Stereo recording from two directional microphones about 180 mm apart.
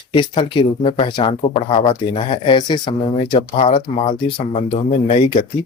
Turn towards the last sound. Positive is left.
turn(degrees=30)  # may be behind; listen again after turning